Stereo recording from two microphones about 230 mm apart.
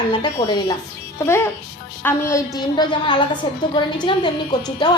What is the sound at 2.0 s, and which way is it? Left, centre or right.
A woman's voice, centre.